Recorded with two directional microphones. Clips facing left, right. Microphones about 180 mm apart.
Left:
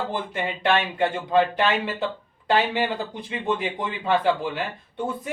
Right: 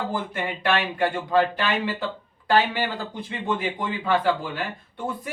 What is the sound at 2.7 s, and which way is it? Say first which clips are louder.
Speech: left 2 dB; 20° left (ahead or behind).